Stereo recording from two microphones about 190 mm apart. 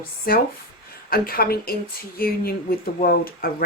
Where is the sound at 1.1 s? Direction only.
50° left (ahead or behind).